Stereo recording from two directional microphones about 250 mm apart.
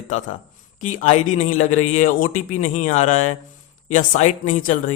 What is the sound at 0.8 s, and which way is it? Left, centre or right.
Speech, left.